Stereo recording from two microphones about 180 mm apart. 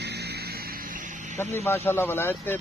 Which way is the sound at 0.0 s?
65° right (ahead or behind).